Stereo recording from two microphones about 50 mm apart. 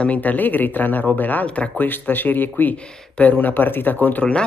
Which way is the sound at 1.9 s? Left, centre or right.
Left.